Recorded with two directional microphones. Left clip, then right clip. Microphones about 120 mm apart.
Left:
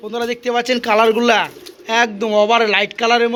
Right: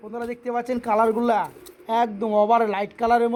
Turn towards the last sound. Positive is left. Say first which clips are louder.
# left 5 dB
turn(degrees=-30)  # may be behind; listen again after turning